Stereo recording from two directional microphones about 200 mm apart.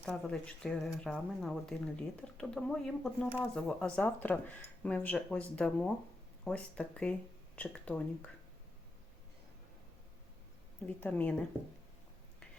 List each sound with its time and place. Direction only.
0.0 s speech: 5° left (ahead or behind)
10.8 s speech: 5° left (ahead or behind)